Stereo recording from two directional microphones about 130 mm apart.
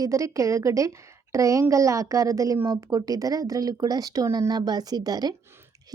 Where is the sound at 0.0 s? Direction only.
25° right (ahead or behind).